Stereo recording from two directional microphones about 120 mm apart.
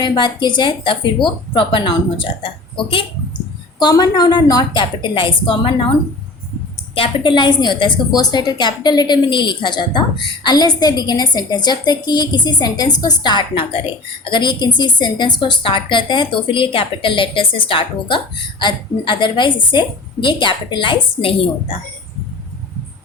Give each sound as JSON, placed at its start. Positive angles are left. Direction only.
{"t": 0.0, "sound": "a woman's voice", "side_deg": 40}
{"t": 3.8, "sound": "a woman's voice", "side_deg": 35}
{"t": 6.9, "sound": "a woman's voice", "side_deg": 45}